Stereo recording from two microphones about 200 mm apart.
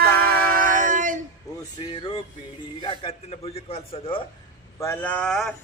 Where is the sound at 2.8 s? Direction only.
25° left (ahead or behind).